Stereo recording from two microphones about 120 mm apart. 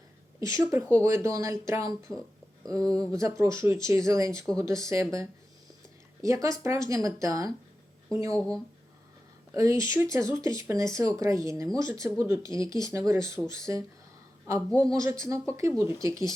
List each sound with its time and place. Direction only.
0.3 s speech: 30° right (ahead or behind)
3.1 s speech: 25° right (ahead or behind)
9.6 s speech: 25° right (ahead or behind)